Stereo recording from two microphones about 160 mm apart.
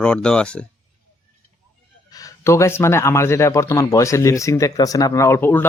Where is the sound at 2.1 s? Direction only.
20° left (ahead or behind).